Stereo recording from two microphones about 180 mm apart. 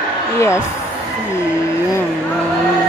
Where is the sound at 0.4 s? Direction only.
15° left (ahead or behind).